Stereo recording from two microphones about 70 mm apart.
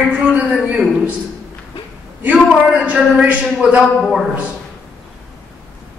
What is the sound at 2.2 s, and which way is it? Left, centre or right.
A man's voice, centre.